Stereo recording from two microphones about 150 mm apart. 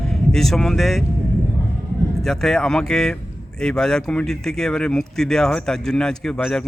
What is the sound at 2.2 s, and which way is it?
Speech, 5° left (ahead or behind).